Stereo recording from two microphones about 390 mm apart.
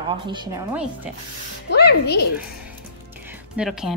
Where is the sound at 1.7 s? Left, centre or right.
Left.